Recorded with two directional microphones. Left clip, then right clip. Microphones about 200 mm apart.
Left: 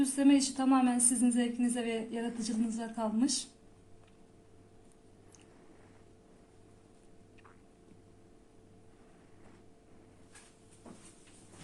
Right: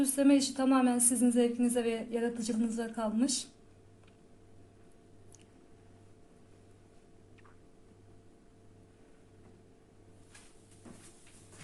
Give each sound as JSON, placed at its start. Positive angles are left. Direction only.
{"t": 0.0, "sound": "speech", "side_deg": -30}